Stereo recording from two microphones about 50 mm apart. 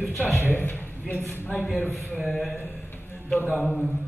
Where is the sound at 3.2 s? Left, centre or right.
Left.